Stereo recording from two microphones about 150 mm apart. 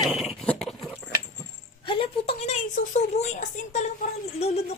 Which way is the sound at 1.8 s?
35° left (ahead or behind).